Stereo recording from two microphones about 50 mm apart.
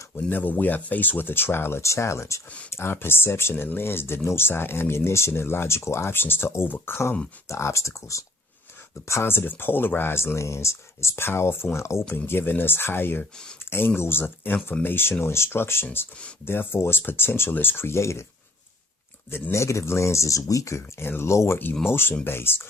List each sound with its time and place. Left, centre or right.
0.3 s speech: left
1.8 s speech: left
3.5 s speech: left
6.1 s speech: left
7.4 s speech: left
9.2 s speech: left
10.3 s speech: left
12.1 s speech: left
19.3 s speech: left
21.0 s speech: left
21.2 s speech: left
21.8 s speech: left